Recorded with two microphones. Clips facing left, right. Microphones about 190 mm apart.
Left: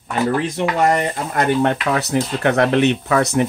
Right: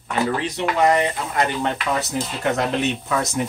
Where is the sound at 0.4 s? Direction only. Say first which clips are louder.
Left 2 dB; 50° left (ahead or behind).